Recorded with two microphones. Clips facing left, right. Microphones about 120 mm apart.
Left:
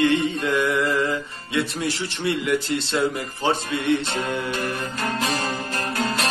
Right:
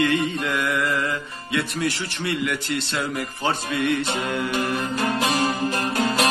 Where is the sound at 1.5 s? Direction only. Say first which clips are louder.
Even; 25° left (ahead or behind).